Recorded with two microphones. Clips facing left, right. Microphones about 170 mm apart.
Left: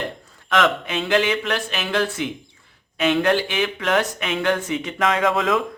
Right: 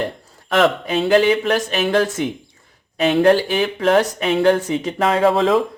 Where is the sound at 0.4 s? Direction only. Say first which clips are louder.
Right 4 dB; 35° right (ahead or behind).